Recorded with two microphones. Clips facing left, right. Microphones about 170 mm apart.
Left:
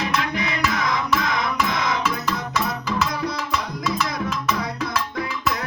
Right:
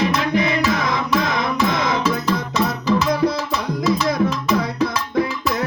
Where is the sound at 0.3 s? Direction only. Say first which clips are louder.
Right 6 dB; 30° right (ahead or behind).